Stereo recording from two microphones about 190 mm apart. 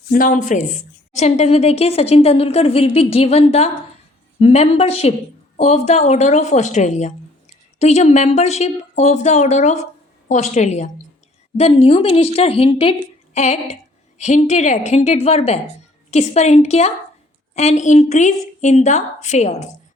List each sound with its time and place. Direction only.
0.1 s a woman's voice: 45° left (ahead or behind)